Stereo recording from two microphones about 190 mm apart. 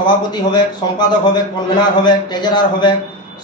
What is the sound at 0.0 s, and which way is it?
A man's voice, 25° left (ahead or behind).